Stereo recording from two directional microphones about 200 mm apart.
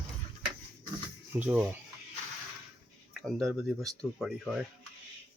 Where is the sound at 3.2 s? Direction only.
Centre (ahead or behind).